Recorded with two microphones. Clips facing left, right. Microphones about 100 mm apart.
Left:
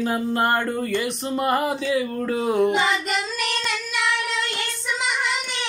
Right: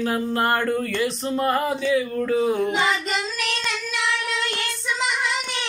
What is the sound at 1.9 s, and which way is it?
Speech, 25° left (ahead or behind).